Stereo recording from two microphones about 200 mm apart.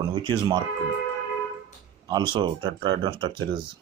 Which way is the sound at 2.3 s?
20° right (ahead or behind).